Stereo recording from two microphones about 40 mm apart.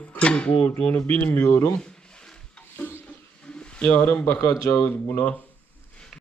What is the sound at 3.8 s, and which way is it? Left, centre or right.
Speech, left.